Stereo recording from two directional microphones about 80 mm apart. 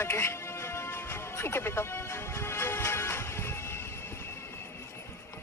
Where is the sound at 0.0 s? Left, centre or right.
Left.